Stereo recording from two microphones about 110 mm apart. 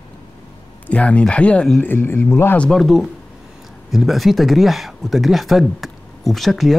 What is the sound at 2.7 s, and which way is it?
Speech, centre (ahead or behind).